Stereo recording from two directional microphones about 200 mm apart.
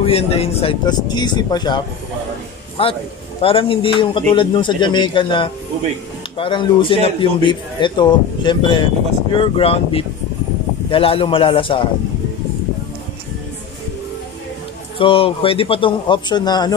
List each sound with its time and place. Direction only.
0.0 s speech: 30° left (ahead or behind)
2.8 s speech: 25° left (ahead or behind)
15.0 s speech: 25° left (ahead or behind)